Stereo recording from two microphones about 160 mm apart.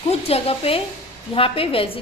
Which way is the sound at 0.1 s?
40° left (ahead or behind).